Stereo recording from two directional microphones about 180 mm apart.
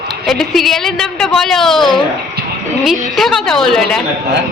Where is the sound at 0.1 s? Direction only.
Centre (ahead or behind).